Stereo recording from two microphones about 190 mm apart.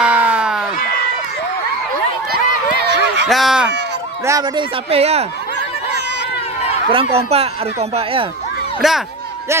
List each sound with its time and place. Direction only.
0.0 s a sound: 5° right (ahead or behind)
2.8 s a sound: 65° right (ahead or behind)
3.3 s speech: centre (ahead or behind)
4.3 s speech: 20° right (ahead or behind)
4.9 s a man's voice: 35° right (ahead or behind)
6.9 s a man's voice: 30° right (ahead or behind)
8.8 s speech: centre (ahead or behind)